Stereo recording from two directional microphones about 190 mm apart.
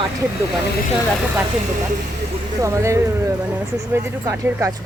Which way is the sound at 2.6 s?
15° right (ahead or behind).